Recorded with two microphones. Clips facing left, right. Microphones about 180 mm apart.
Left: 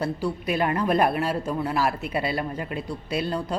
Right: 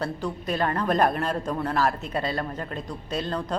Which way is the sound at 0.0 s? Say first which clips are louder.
Left 3 dB; 10° left (ahead or behind).